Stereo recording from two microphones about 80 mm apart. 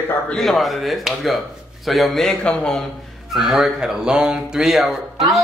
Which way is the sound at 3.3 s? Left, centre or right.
Centre.